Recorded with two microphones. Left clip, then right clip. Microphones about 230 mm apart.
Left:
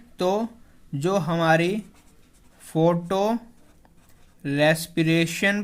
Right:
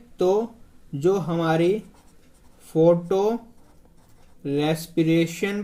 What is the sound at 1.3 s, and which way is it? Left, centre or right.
Speech, left.